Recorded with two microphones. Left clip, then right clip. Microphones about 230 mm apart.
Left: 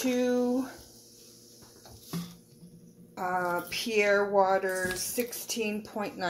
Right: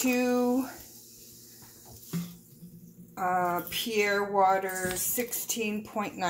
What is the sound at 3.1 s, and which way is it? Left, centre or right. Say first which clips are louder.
Speech: right 2 dB; centre.